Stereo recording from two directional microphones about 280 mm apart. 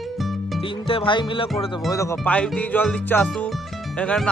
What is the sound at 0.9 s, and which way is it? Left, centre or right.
Music, centre.